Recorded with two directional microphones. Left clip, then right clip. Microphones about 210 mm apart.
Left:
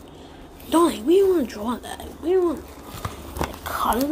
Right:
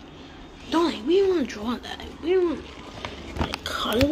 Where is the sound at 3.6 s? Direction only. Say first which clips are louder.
Left 6 dB; 10° left (ahead or behind).